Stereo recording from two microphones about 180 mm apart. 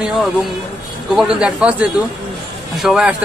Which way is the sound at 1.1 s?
5° right (ahead or behind).